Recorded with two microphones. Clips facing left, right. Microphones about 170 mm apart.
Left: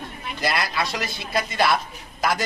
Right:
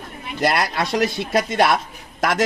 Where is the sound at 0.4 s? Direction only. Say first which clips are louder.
Right 5 dB; 65° right (ahead or behind).